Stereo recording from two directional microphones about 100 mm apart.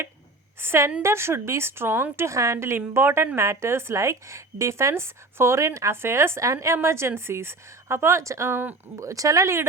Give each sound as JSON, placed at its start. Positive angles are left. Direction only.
{"t": 0.6, "sound": "a woman's voice", "side_deg": -25}
{"t": 9.0, "sound": "speech", "side_deg": -35}